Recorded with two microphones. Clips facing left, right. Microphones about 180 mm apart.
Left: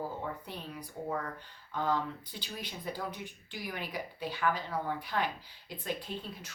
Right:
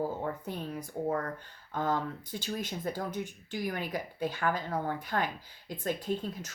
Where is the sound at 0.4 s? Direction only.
45° right (ahead or behind).